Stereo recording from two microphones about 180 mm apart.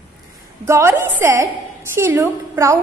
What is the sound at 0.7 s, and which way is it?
A woman's voice, 15° right (ahead or behind).